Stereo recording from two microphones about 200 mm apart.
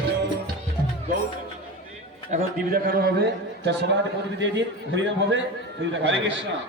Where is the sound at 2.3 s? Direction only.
45° right (ahead or behind).